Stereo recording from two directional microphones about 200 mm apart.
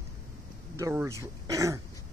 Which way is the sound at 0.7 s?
15° right (ahead or behind).